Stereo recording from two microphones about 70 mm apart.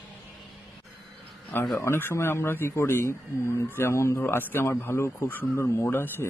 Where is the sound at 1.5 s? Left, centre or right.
Left.